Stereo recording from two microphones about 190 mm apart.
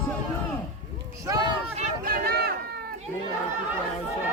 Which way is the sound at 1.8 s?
50° right (ahead or behind).